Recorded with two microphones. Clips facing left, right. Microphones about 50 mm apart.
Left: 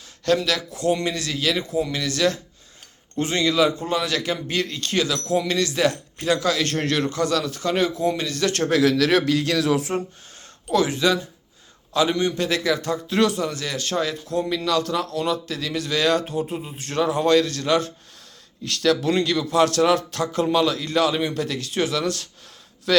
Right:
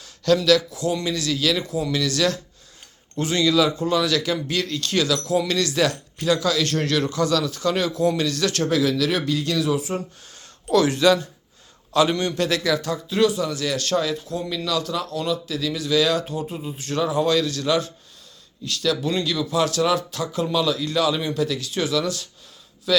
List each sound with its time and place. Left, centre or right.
0.3 s a man's voice: left
6.2 s a man's voice: left; by 8.3 s centre
8.3 s a man's voice: left
8.7 s a man's voice: left
10.7 s speech: centre
12.5 s a man's voice: left
13.1 s speech: left
13.4 s a man's voice: left
13.7 s a man's voice: left
14.0 s a man's voice: left
18.6 s speech: left